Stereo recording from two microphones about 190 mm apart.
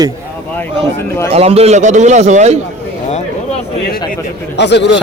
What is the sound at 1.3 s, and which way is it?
A man's voice, 30° right (ahead or behind).